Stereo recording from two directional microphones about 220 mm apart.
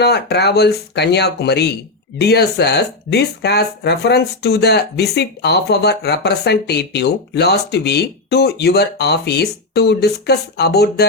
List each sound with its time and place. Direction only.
0.0 s speech: 50° left (ahead or behind)